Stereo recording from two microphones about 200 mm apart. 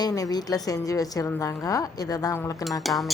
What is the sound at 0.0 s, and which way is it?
A woman's voice, 20° left (ahead or behind).